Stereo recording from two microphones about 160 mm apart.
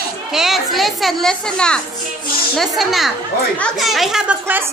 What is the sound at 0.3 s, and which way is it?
A woman's voice, centre (ahead or behind).